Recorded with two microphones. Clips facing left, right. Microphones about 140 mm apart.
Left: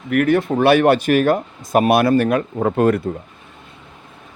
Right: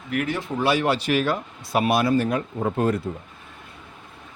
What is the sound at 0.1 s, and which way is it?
Speech, 55° left (ahead or behind).